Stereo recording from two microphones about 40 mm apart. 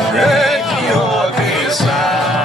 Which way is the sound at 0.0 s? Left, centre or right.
Centre.